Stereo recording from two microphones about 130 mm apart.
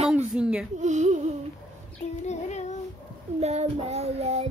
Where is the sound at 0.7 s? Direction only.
65° right (ahead or behind).